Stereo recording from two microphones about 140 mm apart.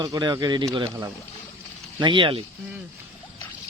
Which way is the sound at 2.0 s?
35° right (ahead or behind).